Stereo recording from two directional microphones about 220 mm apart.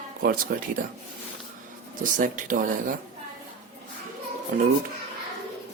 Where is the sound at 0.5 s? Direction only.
45° right (ahead or behind).